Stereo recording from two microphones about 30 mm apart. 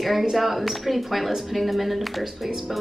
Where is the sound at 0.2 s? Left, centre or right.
Centre.